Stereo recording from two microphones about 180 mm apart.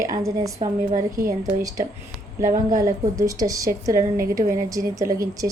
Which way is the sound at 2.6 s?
20° right (ahead or behind).